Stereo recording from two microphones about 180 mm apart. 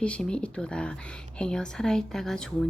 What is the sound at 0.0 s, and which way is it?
Speech, 5° left (ahead or behind).